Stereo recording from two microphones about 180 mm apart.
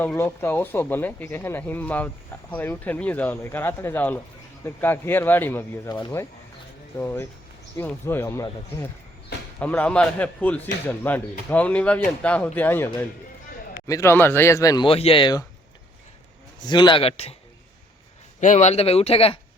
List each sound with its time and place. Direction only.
0.0 s a man's voice: 10° left (ahead or behind)
7.0 s a man's voice: 10° left (ahead or behind)
16.6 s speech: 25° left (ahead or behind)
18.3 s speech: 40° left (ahead or behind)